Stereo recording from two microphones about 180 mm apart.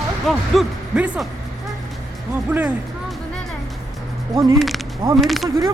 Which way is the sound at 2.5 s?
10° right (ahead or behind).